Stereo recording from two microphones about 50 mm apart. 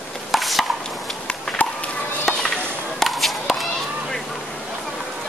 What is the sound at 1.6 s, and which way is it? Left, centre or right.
Children playing, left.